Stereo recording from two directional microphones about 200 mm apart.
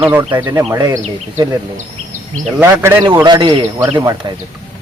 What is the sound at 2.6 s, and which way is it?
A man's voice, 10° right (ahead or behind).